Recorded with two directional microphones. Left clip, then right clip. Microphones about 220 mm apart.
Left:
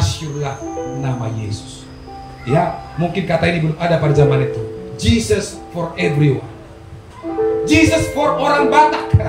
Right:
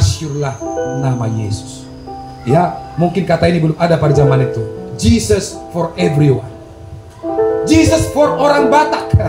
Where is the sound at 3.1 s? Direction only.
35° right (ahead or behind).